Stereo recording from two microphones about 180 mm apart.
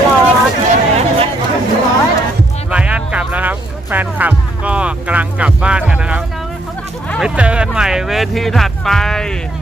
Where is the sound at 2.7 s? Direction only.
5° right (ahead or behind).